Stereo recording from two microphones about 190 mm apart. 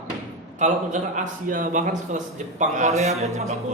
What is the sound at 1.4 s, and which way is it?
A man's voice, 45° right (ahead or behind).